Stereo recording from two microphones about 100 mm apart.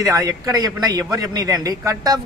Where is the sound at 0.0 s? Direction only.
30° right (ahead or behind).